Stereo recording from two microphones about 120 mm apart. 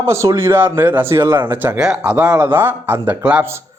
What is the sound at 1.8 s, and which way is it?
A man's voice, 5° right (ahead or behind).